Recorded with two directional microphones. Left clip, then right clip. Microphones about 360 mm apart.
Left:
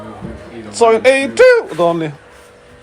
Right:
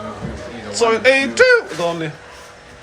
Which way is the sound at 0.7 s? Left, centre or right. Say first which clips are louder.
Left 4 dB; centre.